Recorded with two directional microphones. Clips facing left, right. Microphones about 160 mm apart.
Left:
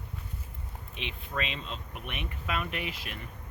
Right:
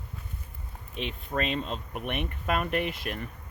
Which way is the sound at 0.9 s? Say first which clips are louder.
Right 5 dB; 40° right (ahead or behind).